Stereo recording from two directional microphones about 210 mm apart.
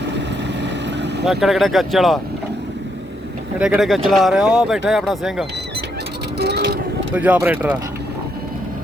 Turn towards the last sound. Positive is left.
turn(degrees=-10)  # may be behind; listen again after turning